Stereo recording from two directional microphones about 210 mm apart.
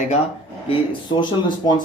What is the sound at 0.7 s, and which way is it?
Speech, 20° left (ahead or behind).